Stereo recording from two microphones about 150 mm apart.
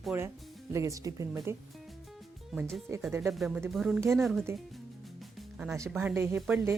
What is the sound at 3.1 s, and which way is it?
Speech, 15° right (ahead or behind).